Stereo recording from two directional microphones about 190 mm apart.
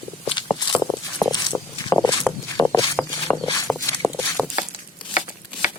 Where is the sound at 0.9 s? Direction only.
20° left (ahead or behind).